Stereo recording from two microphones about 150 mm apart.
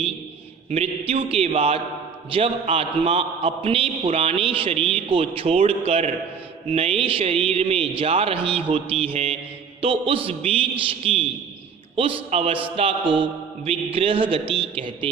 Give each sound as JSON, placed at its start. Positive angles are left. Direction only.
{"t": 0.7, "sound": "a man's voice", "side_deg": -40}